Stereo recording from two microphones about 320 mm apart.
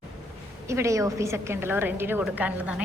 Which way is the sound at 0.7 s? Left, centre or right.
Centre.